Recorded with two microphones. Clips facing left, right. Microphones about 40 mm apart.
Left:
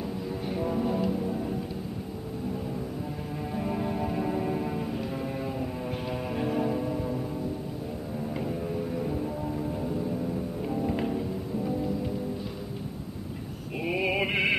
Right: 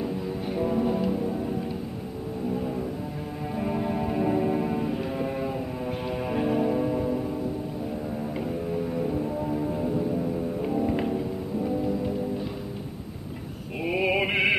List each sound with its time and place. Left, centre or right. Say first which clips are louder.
0.5 s music: right 3 dB; centre
3.5 s music: right 3 dB; centre
8.4 s music: right 2 dB; centre
13.8 s mantra: right 3 dB; centre